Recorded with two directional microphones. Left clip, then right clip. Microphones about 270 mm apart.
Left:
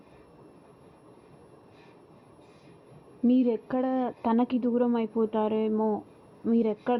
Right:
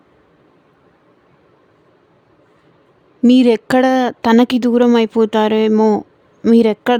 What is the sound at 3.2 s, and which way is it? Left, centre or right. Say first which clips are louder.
Speech: right 14 dB; right.